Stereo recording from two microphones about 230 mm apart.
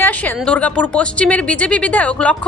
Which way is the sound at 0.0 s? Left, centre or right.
Centre.